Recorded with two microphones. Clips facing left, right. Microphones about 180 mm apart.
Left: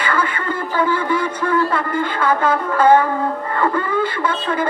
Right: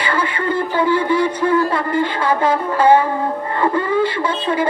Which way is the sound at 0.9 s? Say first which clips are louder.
Right 4 dB; 15° right (ahead or behind).